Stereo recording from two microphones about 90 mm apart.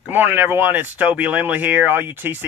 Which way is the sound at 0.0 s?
20° right (ahead or behind).